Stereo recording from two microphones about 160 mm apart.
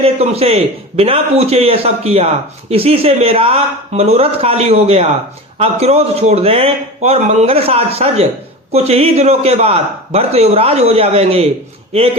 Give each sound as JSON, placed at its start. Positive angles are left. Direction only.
{"t": 0.0, "sound": "a man's voice", "side_deg": -40}